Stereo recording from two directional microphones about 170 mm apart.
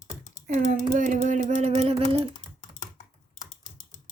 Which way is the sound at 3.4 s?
45° left (ahead or behind).